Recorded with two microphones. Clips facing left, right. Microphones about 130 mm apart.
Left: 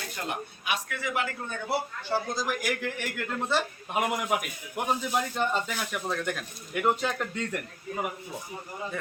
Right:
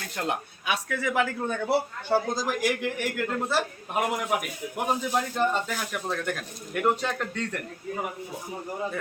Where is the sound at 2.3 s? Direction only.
40° right (ahead or behind).